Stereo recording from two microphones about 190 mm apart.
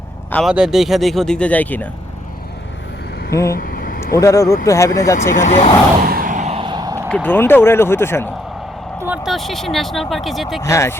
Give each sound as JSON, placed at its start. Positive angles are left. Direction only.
{"t": 0.3, "sound": "speech", "side_deg": 5}
{"t": 3.5, "sound": "vehicle", "side_deg": 50}
{"t": 4.2, "sound": "speech", "side_deg": 15}
{"t": 5.3, "sound": "speech", "side_deg": 40}
{"t": 6.0, "sound": "vehicle", "side_deg": -50}
{"t": 6.6, "sound": "a sound", "side_deg": -25}
{"t": 7.3, "sound": "speech", "side_deg": 10}
{"t": 9.0, "sound": "speech", "side_deg": -10}
{"t": 10.6, "sound": "speech", "side_deg": 15}